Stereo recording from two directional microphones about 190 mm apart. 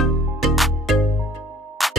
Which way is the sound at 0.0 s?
Centre (ahead or behind).